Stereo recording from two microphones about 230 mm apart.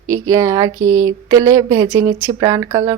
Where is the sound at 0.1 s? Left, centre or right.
Centre.